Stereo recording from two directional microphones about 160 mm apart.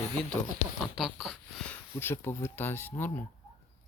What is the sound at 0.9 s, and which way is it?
Speech, centre (ahead or behind).